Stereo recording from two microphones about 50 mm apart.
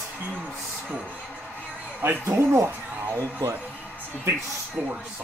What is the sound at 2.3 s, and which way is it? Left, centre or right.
Speech, right.